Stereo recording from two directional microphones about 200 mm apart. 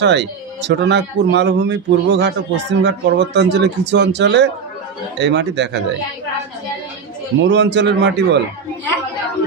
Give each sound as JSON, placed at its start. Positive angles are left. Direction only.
{"t": 0.0, "sound": "speech", "side_deg": -60}
{"t": 7.4, "sound": "speech", "side_deg": -60}